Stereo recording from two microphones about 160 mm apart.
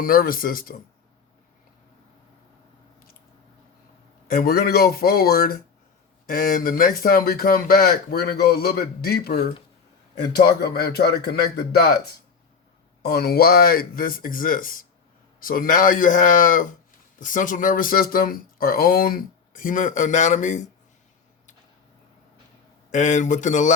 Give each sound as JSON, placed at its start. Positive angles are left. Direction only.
{"t": 0.0, "sound": "speech", "side_deg": 65}
{"t": 4.3, "sound": "speech", "side_deg": 65}
{"t": 13.0, "sound": "speech", "side_deg": 80}
{"t": 22.9, "sound": "speech", "side_deg": 50}